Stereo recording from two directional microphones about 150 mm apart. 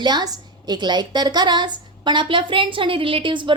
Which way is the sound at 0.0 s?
30° right (ahead or behind).